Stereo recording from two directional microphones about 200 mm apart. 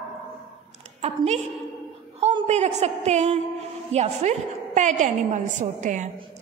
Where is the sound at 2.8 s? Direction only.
35° right (ahead or behind).